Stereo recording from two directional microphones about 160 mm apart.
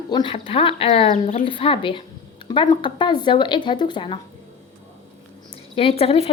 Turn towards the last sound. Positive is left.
turn(degrees=35)  # may be behind; listen again after turning